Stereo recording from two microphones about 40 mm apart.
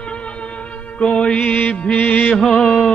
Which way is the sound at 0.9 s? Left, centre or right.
Left.